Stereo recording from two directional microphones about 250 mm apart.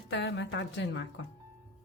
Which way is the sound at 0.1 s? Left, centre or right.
Left.